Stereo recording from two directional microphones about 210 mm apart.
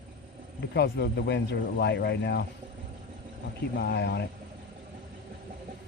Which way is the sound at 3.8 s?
55° left (ahead or behind).